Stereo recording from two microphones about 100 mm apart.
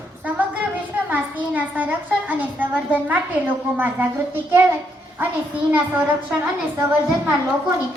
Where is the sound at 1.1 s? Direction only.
15° right (ahead or behind).